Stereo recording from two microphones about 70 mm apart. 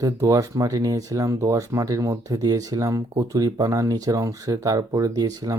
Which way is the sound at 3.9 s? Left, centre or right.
Right.